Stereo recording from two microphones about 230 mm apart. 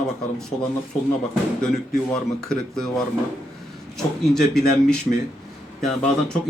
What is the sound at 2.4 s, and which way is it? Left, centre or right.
Speech, centre.